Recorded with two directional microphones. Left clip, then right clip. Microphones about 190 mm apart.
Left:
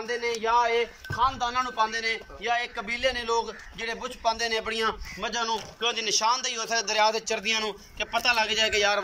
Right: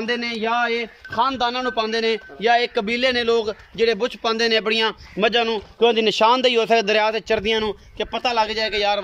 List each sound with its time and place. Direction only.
0.0 s a man's voice: 55° right (ahead or behind); by 9.0 s 20° right (ahead or behind)